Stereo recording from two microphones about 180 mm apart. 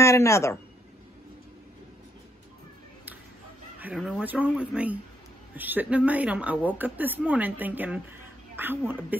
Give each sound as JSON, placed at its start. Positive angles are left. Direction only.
{"t": 0.0, "sound": "a man's voice", "side_deg": 15}
{"t": 3.8, "sound": "speech", "side_deg": -5}